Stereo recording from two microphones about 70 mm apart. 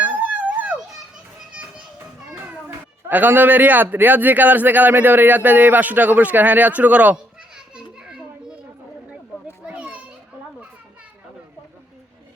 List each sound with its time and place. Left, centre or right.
0.0 s a sound: right
2.0 s a child's voice: right
7.8 s children playing: centre
9.6 s children playing: centre